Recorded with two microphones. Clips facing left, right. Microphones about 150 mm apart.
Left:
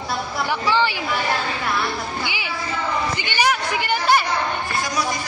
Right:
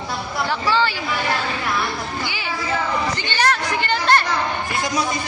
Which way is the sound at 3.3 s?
10° left (ahead or behind).